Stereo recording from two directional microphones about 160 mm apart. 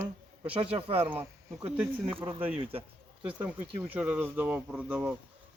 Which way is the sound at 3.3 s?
5° right (ahead or behind).